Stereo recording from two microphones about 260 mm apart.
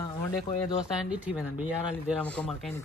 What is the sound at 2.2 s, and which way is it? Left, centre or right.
Speech, centre.